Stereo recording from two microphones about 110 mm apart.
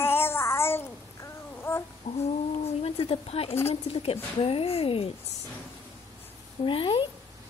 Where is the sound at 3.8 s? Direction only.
65° left (ahead or behind).